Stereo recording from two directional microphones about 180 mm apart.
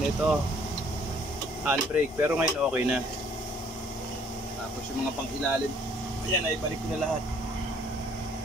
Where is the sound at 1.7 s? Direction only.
10° right (ahead or behind).